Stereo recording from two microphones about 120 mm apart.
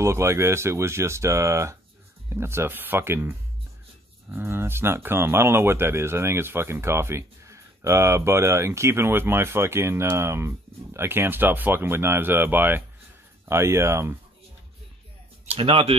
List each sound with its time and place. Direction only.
0.0 s speech: 25° right (ahead or behind)
15.5 s speech: 50° right (ahead or behind)